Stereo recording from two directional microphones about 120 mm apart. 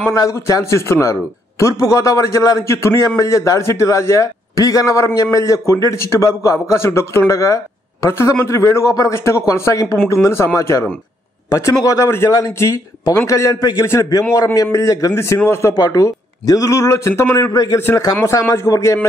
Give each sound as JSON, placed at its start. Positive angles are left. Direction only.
{"t": 0.1, "sound": "a man's voice", "side_deg": 25}